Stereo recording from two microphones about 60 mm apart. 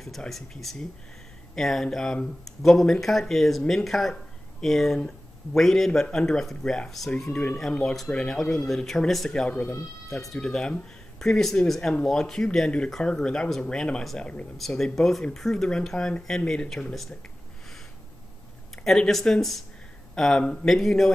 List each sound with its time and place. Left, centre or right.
0.3 s speech: centre
7.7 s speech: centre
9.3 s speech: centre
14.8 s speech: centre
18.9 s speech: centre